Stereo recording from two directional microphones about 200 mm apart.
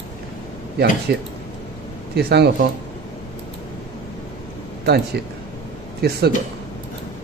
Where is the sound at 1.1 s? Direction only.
55° right (ahead or behind).